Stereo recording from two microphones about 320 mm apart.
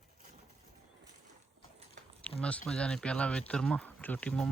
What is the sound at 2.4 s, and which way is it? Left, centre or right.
Speech, centre.